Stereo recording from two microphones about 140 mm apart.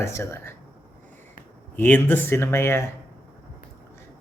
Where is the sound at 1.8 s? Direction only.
10° left (ahead or behind).